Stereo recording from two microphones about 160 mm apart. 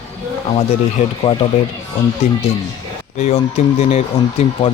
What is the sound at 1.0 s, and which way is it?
Speech, 40° left (ahead or behind).